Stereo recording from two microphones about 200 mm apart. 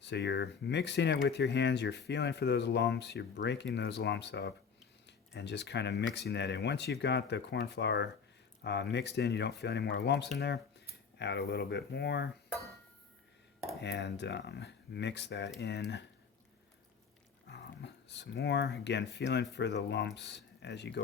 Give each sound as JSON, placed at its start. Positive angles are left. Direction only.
{"t": 0.0, "sound": "speech", "side_deg": 60}
{"t": 13.8, "sound": "speech", "side_deg": 60}
{"t": 17.5, "sound": "speech", "side_deg": 60}